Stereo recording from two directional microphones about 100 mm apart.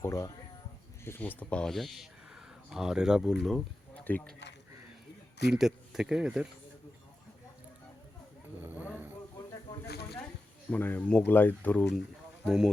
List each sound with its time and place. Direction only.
0.0 s speech: 30° left (ahead or behind); by 3.5 s 5° right (ahead or behind)
4.0 s speech: 20° left (ahead or behind)
5.5 s speech: 5° right (ahead or behind)
8.6 s a sound: 20° right (ahead or behind)
10.7 s speech: 15° left (ahead or behind)
12.5 s speech: 5° right (ahead or behind)